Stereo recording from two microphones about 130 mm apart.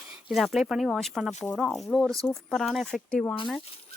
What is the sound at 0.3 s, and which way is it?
Speech, centre (ahead or behind).